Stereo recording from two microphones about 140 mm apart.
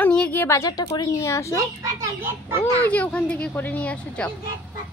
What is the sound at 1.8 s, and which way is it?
Speech, 20° right (ahead or behind).